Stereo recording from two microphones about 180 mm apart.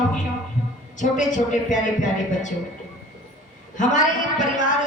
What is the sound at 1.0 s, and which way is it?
Speech, 45° left (ahead or behind).